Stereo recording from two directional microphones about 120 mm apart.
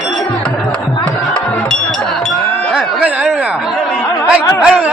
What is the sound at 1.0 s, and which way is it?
Music, 10° left (ahead or behind).